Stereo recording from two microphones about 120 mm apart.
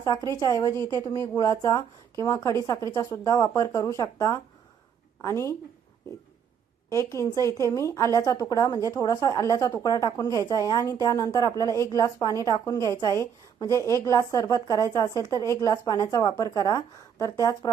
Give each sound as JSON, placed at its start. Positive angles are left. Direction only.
{"t": 0.3, "sound": "a woman's voice", "side_deg": 35}
{"t": 0.8, "sound": "a woman's voice", "side_deg": -35}
{"t": 1.4, "sound": "a woman's voice", "side_deg": 30}
{"t": 6.9, "sound": "a woman's voice", "side_deg": 25}